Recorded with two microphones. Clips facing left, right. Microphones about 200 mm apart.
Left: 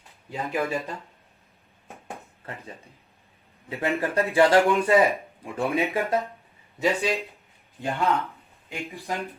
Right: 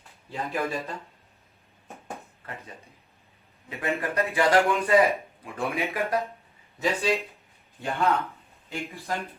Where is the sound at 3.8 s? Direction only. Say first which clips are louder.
Left 3 dB; 30° left (ahead or behind).